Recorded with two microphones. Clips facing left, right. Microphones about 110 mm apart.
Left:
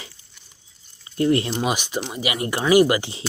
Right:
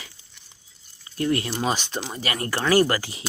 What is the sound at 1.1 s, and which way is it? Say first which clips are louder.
Speech: left 5 dB; 25° left (ahead or behind).